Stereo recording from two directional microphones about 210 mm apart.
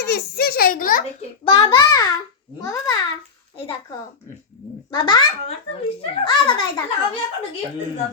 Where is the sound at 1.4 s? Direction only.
20° left (ahead or behind).